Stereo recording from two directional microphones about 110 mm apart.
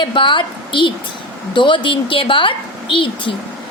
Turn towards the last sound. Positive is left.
turn(degrees=50)  # may be behind; listen again after turning